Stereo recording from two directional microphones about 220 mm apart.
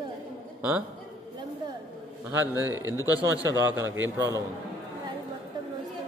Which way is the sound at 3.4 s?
15° left (ahead or behind).